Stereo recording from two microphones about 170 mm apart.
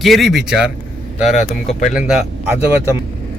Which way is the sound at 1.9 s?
5° right (ahead or behind).